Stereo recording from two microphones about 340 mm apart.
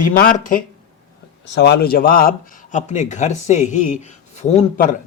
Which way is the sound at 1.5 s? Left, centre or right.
Left.